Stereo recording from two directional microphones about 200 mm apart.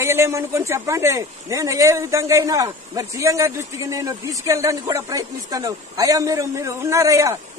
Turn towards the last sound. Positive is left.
turn(degrees=-15)  # may be behind; listen again after turning